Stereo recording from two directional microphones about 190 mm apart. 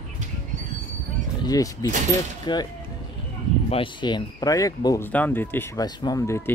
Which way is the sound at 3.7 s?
25° left (ahead or behind).